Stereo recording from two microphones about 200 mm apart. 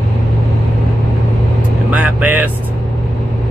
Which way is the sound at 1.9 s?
5° right (ahead or behind).